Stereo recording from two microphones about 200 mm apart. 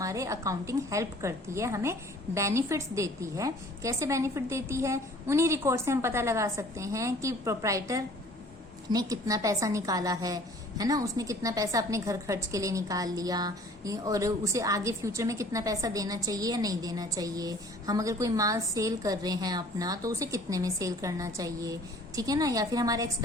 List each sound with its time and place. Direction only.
0.0 s a woman's voice: 15° right (ahead or behind)